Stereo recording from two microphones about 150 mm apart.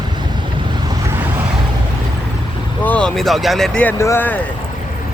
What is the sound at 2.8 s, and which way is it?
Speech, 10° left (ahead or behind).